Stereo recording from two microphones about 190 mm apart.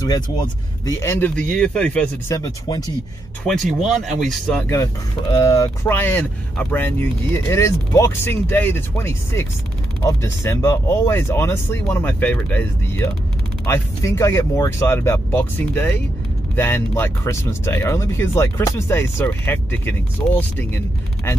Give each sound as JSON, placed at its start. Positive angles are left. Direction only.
{"t": 0.8, "sound": "speech", "side_deg": 15}
{"t": 2.3, "sound": "speech", "side_deg": 20}
{"t": 3.4, "sound": "speech", "side_deg": 0}